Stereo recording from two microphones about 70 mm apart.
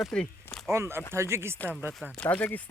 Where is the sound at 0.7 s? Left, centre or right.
Right.